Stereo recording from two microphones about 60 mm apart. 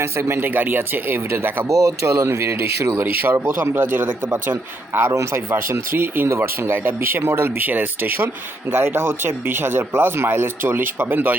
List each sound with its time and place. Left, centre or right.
0.0 s speech: right
1.7 s speech: right
5.1 s speech: right
6.2 s speech: right
6.7 s speech: right